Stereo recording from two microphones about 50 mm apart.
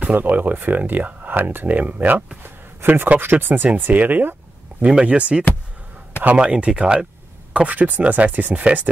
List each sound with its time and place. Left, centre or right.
0.0 s speech: right
2.4 s a sound: right
3.2 s speech: right
4.8 s speech: right
7.5 s speech: right